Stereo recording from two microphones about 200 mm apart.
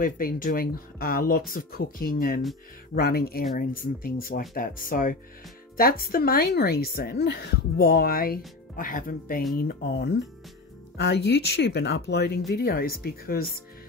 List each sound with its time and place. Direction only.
0.0 s a woman's voice: 45° left (ahead or behind)